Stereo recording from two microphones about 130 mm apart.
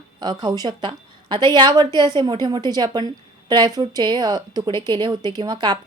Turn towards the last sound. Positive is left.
turn(degrees=-35)  # may be behind; listen again after turning